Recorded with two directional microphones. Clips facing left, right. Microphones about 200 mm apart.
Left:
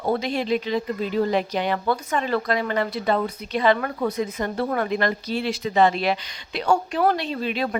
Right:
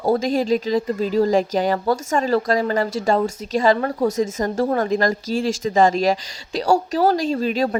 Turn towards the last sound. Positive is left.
turn(degrees=-40)  # may be behind; listen again after turning